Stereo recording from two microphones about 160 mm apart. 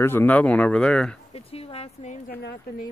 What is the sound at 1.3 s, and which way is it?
Speech, 40° left (ahead or behind).